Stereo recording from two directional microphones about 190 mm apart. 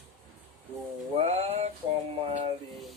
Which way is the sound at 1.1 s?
35° right (ahead or behind).